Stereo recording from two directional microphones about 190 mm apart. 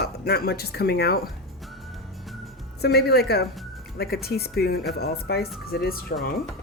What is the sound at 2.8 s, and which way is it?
Speech, 60° left (ahead or behind).